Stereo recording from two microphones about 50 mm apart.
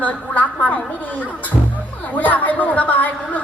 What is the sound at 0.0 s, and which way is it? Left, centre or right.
A woman's voice, left.